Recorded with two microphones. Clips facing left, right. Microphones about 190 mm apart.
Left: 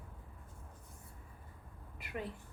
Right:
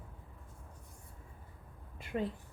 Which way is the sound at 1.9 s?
25° right (ahead or behind).